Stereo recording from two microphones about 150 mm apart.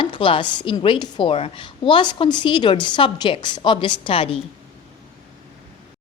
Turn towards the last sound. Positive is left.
turn(degrees=40)  # may be behind; listen again after turning